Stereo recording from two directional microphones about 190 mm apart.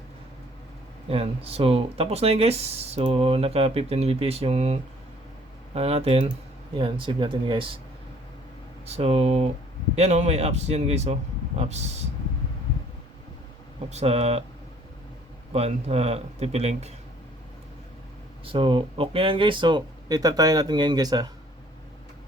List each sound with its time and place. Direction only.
1.0 s speech: 30° right (ahead or behind)
8.9 s speech: 35° right (ahead or behind)
13.9 s speech: 35° right (ahead or behind)
15.5 s speech: 35° right (ahead or behind)
18.4 s speech: 25° right (ahead or behind)